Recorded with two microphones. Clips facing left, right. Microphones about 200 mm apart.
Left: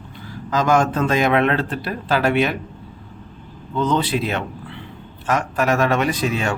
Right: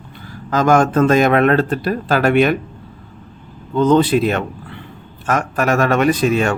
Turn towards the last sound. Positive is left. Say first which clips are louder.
# right 6 dB
turn(degrees=-55)  # may be behind; listen again after turning